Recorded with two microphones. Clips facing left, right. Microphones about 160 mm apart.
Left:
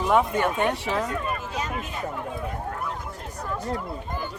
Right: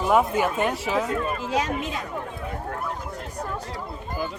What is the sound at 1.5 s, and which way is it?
Speech, 90° right.